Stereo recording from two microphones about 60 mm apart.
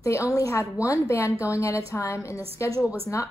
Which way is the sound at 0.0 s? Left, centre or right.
Left.